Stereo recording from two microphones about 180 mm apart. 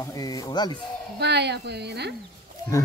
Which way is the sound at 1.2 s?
70° right (ahead or behind).